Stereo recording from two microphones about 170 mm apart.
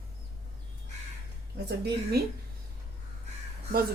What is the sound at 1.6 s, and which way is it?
Speech, 75° right (ahead or behind).